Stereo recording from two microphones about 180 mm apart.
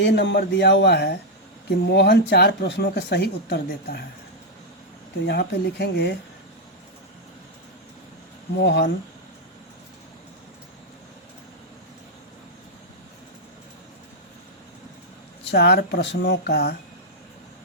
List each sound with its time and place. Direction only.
0.0 s speech: 75° left (ahead or behind)
5.2 s speech: 65° left (ahead or behind)
8.6 s speech: 70° left (ahead or behind)
15.4 s speech: 65° left (ahead or behind)